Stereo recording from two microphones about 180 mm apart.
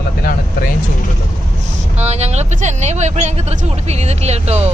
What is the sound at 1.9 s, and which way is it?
Speech, 35° right (ahead or behind).